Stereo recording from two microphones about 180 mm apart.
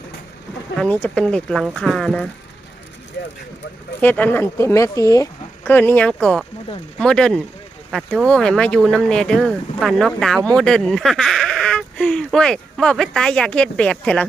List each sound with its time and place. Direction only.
0.8 s speech: 10° left (ahead or behind)
3.2 s speech: 70° left (ahead or behind)
4.0 s speech: 10° left (ahead or behind)